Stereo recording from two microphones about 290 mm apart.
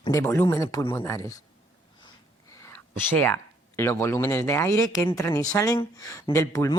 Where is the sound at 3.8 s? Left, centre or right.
Centre.